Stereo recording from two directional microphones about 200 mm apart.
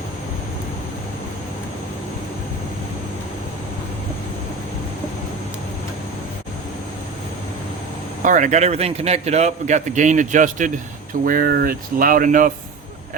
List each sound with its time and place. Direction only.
8.2 s a man's voice: 40° right (ahead or behind)